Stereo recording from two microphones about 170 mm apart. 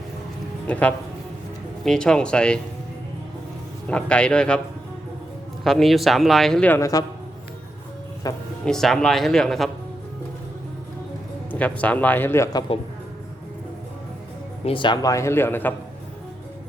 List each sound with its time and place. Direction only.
0.7 s speech: 10° left (ahead or behind)
3.8 s speech: 5° left (ahead or behind)
5.6 s speech: centre (ahead or behind); by 7.0 s 20° left (ahead or behind)
8.2 s speech: 20° left (ahead or behind)
8.6 s speech: 5° left (ahead or behind)
11.5 s speech: 10° left (ahead or behind)
14.6 s speech: 30° left (ahead or behind); by 15.7 s 10° left (ahead or behind)